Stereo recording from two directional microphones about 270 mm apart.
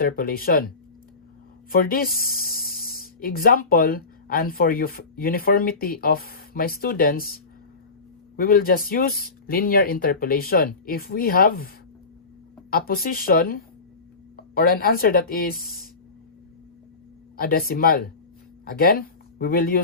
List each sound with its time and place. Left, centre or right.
0.0 s speech: left
1.7 s speech: left
8.4 s speech: left
12.7 s speech: left
17.3 s speech: left